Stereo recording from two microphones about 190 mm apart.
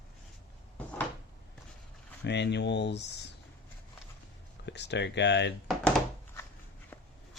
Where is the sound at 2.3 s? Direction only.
65° left (ahead or behind).